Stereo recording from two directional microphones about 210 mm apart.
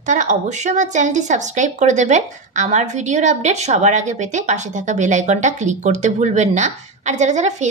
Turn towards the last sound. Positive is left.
turn(degrees=-35)  # may be behind; listen again after turning